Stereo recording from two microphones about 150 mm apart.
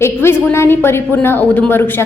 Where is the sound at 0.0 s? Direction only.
15° left (ahead or behind).